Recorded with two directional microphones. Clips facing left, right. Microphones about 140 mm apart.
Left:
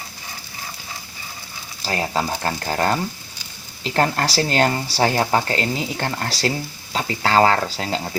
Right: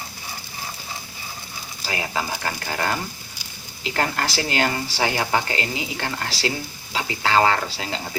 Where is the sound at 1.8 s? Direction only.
40° left (ahead or behind).